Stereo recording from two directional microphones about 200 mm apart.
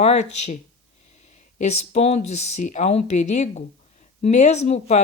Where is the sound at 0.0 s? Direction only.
35° left (ahead or behind).